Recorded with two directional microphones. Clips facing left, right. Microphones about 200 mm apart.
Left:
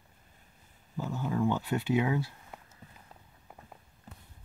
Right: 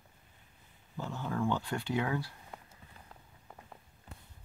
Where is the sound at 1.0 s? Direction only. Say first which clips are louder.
Left 4 dB; 15° left (ahead or behind).